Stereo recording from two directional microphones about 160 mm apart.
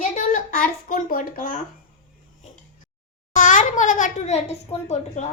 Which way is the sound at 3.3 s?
50° left (ahead or behind).